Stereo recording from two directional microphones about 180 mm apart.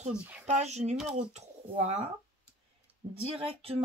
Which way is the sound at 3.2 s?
35° right (ahead or behind).